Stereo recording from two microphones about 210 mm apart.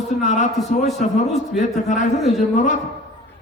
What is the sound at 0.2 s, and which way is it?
Speech, 35° left (ahead or behind).